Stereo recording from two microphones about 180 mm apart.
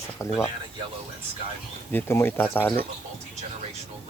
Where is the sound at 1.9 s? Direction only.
10° left (ahead or behind).